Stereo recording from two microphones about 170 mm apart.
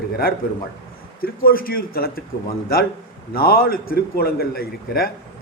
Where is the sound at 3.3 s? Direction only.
60° left (ahead or behind).